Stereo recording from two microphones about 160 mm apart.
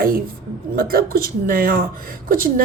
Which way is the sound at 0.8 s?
65° right (ahead or behind).